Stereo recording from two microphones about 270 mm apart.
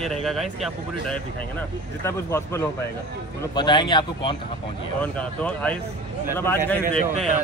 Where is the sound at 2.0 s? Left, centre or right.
Centre.